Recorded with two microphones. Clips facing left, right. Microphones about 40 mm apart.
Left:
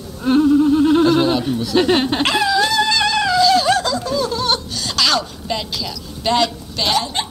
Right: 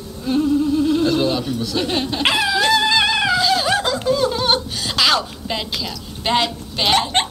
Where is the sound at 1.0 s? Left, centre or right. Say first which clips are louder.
Left 3 dB; left.